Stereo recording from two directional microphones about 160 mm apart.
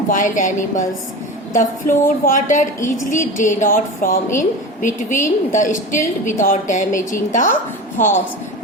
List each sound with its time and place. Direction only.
0.1 s speech: 55° left (ahead or behind)